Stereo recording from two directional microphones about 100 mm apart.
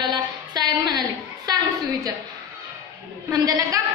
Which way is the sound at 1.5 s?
40° right (ahead or behind).